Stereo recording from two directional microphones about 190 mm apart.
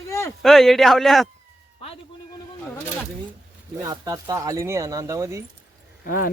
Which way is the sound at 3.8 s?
20° right (ahead or behind).